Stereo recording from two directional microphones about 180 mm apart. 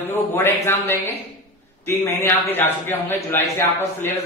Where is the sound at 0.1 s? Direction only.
10° left (ahead or behind).